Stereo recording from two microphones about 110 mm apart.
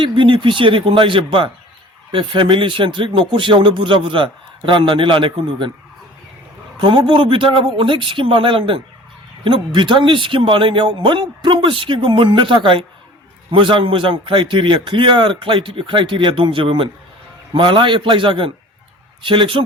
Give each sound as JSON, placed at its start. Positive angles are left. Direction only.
{"t": 0.0, "sound": "speech", "side_deg": -50}
{"t": 6.7, "sound": "speech", "side_deg": -50}